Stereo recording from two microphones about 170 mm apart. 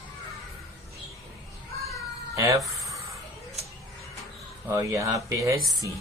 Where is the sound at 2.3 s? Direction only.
20° right (ahead or behind).